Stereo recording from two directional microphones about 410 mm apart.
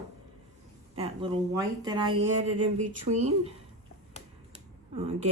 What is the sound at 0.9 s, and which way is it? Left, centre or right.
Speech, centre.